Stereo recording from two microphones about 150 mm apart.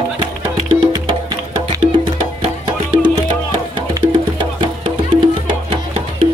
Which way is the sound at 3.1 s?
30° right (ahead or behind).